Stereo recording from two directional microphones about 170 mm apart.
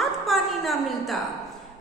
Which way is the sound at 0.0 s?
Centre (ahead or behind).